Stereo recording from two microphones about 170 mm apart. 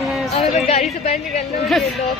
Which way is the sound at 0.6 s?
35° left (ahead or behind).